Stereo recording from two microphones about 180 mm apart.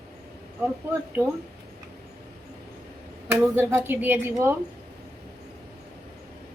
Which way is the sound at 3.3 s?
10° right (ahead or behind).